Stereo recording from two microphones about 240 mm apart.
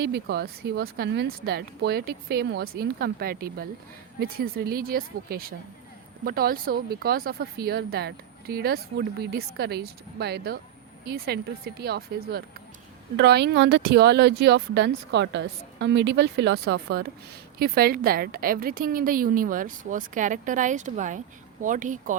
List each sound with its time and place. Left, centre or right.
0.0 s speech: right